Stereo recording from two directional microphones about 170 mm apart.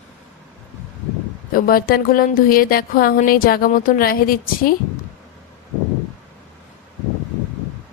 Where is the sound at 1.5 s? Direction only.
60° left (ahead or behind).